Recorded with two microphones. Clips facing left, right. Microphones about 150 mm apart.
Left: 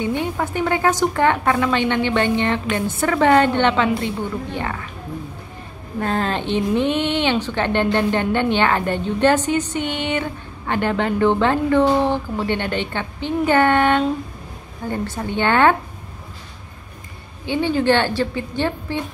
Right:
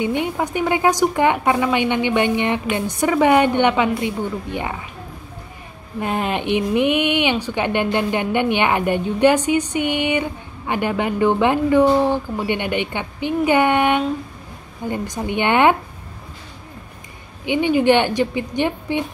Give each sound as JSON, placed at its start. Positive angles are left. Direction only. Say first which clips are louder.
{"t": 0.0, "sound": "a woman's voice", "louder": "right 1 dB", "side_deg": -15}
{"t": 5.9, "sound": "a woman's voice", "louder": "even", "side_deg": -15}
{"t": 17.5, "sound": "a woman's voice", "louder": "right 2 dB", "side_deg": -15}